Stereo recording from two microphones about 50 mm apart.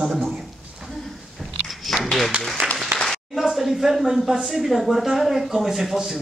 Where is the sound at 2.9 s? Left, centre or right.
Right.